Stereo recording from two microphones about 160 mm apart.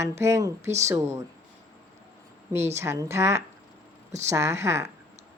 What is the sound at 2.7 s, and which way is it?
A woman's voice, 15° right (ahead or behind).